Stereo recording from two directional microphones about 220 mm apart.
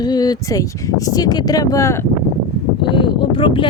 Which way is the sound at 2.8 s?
20° left (ahead or behind).